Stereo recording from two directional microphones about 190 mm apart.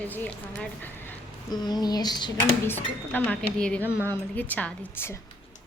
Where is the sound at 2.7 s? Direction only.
10° left (ahead or behind).